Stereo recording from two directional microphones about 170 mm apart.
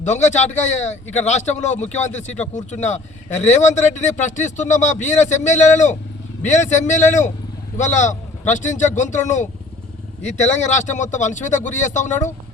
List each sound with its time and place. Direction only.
0.0 s speech: 45° left (ahead or behind)